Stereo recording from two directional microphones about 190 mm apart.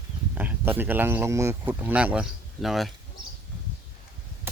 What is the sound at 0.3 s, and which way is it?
Speech, 10° right (ahead or behind).